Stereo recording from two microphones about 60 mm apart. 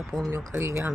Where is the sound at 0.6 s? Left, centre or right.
Right.